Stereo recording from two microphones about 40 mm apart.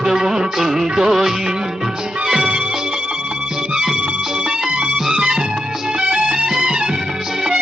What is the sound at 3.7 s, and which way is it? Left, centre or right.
Music, centre.